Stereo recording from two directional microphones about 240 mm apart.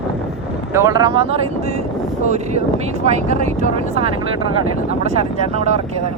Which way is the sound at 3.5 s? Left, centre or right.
Right.